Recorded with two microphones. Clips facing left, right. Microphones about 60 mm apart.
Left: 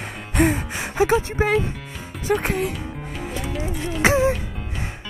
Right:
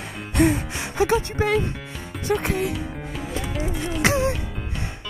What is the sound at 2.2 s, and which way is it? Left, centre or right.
Music, centre.